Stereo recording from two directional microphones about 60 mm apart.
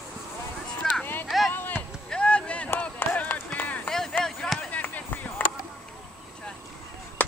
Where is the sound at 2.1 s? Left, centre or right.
Centre.